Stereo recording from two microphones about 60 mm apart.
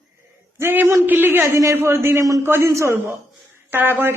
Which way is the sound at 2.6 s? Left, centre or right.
Right.